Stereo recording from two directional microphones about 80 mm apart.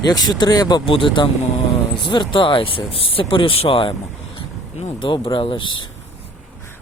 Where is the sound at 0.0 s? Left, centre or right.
Left.